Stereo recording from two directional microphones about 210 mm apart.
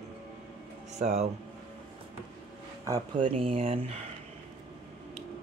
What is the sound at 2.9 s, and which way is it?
Speech, 25° right (ahead or behind).